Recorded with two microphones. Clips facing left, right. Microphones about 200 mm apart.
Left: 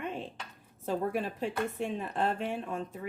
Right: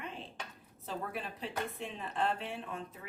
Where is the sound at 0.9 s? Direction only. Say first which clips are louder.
Left 9 dB; 45° left (ahead or behind).